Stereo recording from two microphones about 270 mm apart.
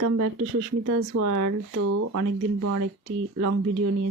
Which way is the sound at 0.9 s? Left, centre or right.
Right.